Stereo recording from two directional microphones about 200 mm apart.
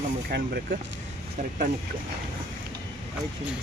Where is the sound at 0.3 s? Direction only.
50° right (ahead or behind).